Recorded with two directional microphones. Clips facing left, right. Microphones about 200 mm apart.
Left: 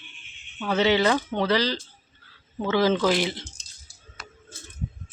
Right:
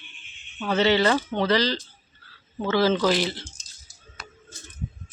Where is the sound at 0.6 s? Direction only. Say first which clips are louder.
Even; 10° left (ahead or behind).